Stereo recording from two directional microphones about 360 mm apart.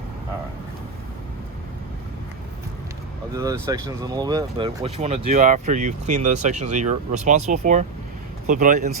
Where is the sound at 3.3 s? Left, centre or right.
Centre.